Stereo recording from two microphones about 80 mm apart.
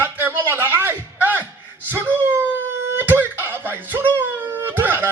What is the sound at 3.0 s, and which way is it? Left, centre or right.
Music, right.